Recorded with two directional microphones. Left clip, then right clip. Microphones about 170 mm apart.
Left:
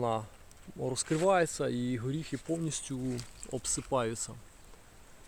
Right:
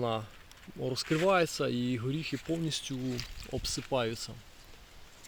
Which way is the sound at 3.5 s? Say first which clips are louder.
Even; 5° right (ahead or behind).